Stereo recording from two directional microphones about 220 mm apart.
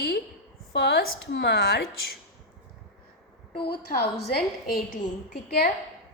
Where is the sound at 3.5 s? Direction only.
45° left (ahead or behind).